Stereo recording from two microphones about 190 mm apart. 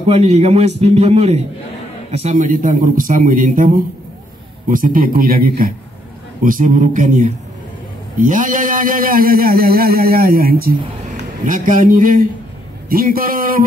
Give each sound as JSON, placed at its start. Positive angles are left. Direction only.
{"t": 0.1, "sound": "a man's voice", "side_deg": -35}